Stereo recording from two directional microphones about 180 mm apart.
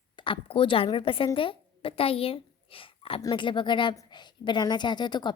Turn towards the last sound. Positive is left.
turn(degrees=25)  # may be behind; listen again after turning